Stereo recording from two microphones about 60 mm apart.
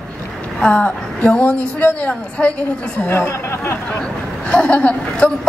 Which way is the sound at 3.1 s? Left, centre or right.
Left.